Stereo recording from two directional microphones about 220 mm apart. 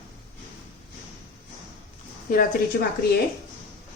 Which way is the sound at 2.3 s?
40° left (ahead or behind).